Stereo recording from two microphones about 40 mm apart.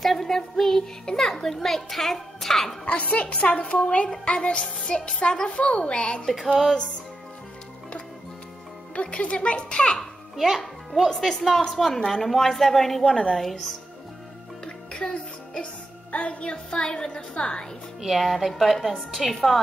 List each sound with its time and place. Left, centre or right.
0.0 s music: centre
1.0 s speech: centre
2.8 s a woman's voice: left
6.2 s a woman's voice: centre
6.5 s speech: centre
8.9 s a woman's voice: left
10.3 s a child's voice: centre
15.1 s music: left
16.2 s a woman's voice: left
16.8 s a woman's voice: centre
18.0 s a woman's voice: centre